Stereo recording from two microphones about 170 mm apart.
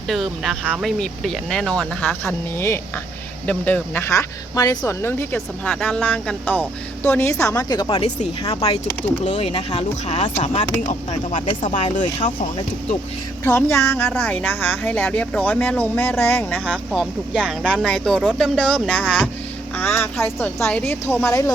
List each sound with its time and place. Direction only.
0.1 s speech: centre (ahead or behind); by 8.0 s 25° left (ahead or behind)
8.0 s speech: 40° left (ahead or behind)
13.4 s speech: 15° left (ahead or behind)
17.0 s speech: 10° right (ahead or behind)
17.7 s speech: 5° left (ahead or behind)